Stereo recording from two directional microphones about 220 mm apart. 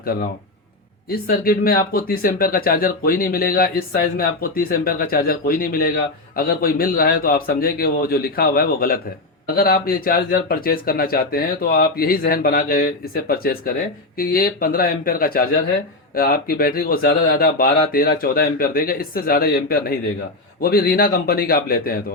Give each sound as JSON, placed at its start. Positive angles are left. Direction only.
{"t": 1.0, "sound": "speech", "side_deg": 40}